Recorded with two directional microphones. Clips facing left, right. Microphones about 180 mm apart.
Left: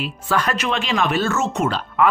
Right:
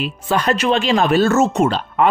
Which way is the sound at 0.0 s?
20° right (ahead or behind).